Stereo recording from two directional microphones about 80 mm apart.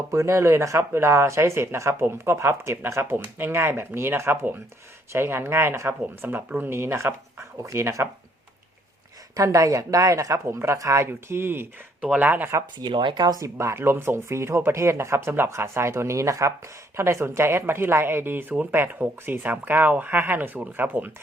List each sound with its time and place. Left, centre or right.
0.1 s speech: right
9.3 s speech: right
12.8 s speech: right
13.2 s speech: right
13.6 s speech: right